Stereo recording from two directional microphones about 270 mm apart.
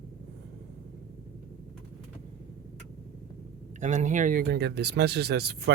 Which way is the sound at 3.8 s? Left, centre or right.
Right.